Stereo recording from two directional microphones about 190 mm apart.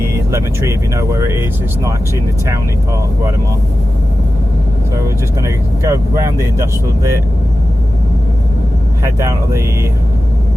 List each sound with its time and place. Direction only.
0.1 s speech: 15° right (ahead or behind)
5.0 s speech: 15° right (ahead or behind)
9.0 s speech: 15° right (ahead or behind)